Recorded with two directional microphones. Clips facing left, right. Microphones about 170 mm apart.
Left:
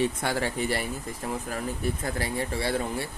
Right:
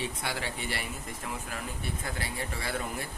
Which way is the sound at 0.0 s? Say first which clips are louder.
Left 8 dB; 45° left (ahead or behind).